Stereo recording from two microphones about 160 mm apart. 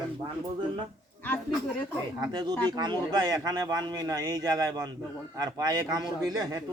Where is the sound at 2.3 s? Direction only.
25° right (ahead or behind).